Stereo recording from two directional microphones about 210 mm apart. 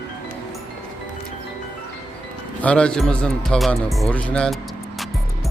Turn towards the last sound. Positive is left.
turn(degrees=5)  # may be behind; listen again after turning